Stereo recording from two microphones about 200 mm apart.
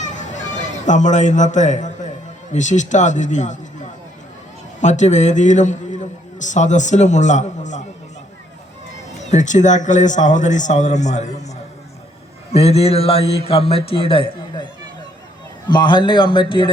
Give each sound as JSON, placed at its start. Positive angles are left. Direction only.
{"t": 0.0, "sound": "a sound", "side_deg": 35}
{"t": 2.5, "sound": "a man's voice", "side_deg": 35}
{"t": 4.8, "sound": "a man's voice", "side_deg": 35}
{"t": 9.3, "sound": "a man's voice", "side_deg": 35}
{"t": 12.5, "sound": "a man's voice", "side_deg": 30}
{"t": 15.7, "sound": "a man's voice", "side_deg": 20}